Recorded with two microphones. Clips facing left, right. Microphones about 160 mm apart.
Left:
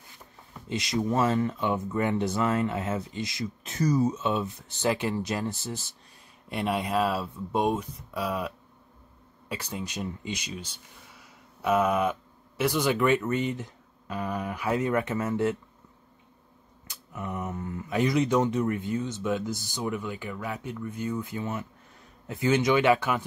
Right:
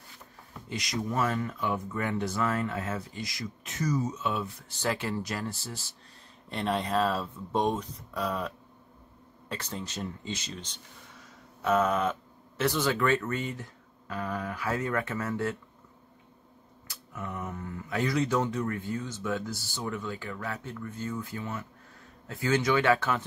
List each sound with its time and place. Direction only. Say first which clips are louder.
0.7 s speech: left 5 dB; 25° left (ahead or behind)
16.8 s speech: left 3 dB; 20° left (ahead or behind)